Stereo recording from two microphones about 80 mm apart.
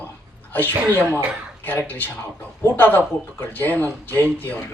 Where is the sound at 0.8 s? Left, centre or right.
Left.